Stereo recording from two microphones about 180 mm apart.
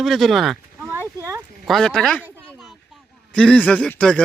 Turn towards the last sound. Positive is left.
turn(degrees=5)  # may be behind; listen again after turning